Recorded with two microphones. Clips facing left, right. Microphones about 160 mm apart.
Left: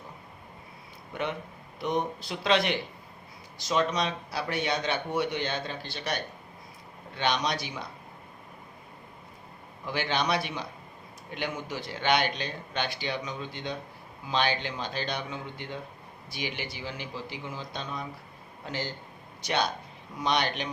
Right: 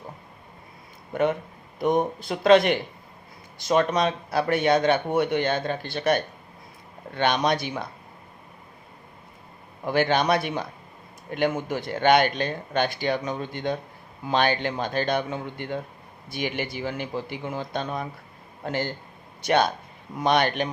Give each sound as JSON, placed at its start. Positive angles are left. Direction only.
{"t": 1.1, "sound": "speech", "side_deg": -45}
{"t": 9.8, "sound": "speech", "side_deg": -50}